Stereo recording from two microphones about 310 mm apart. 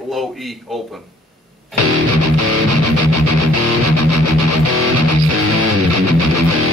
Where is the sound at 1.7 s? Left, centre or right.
Right.